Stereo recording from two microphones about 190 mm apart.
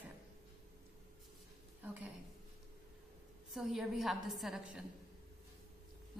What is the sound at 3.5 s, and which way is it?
A woman's voice, centre (ahead or behind).